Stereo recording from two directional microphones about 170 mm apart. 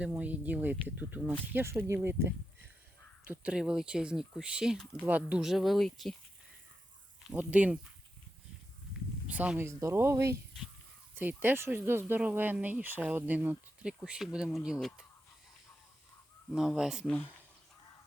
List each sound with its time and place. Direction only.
0.0 s speech: 10° right (ahead or behind)
7.3 s speech: 5° right (ahead or behind)
9.2 s speech: 10° right (ahead or behind)
16.6 s speech: 5° right (ahead or behind)